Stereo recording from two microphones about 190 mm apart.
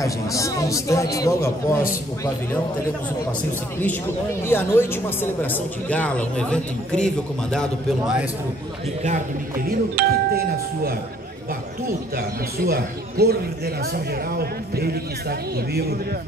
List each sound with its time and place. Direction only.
0.0 s speech: 15° left (ahead or behind)
4.5 s a man's voice: 10° left (ahead or behind)
9.7 s speech: 55° right (ahead or behind)
12.6 s speech: 55° right (ahead or behind)